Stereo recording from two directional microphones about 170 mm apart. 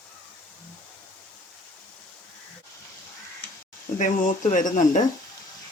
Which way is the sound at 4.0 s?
50° left (ahead or behind).